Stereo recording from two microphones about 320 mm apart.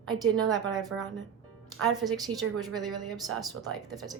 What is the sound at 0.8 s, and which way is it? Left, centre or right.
Speech, centre.